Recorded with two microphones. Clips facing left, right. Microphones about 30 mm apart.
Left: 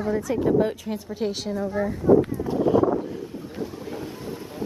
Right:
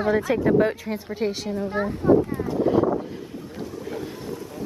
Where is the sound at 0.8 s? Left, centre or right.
Centre.